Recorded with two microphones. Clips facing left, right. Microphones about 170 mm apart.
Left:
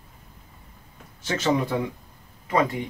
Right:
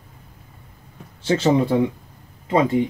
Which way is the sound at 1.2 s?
30° right (ahead or behind).